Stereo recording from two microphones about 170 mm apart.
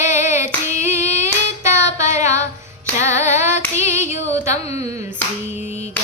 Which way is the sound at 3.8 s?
15° right (ahead or behind).